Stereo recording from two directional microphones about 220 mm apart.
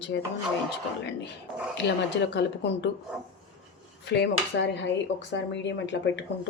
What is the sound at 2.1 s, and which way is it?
Speech, 50° left (ahead or behind).